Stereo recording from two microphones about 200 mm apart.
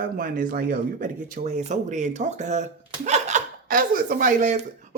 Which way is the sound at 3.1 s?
35° right (ahead or behind).